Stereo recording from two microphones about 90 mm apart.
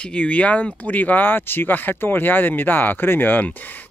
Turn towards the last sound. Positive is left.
turn(degrees=20)  # may be behind; listen again after turning